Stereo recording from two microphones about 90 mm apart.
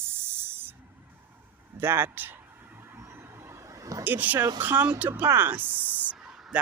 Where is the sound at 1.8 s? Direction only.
25° right (ahead or behind).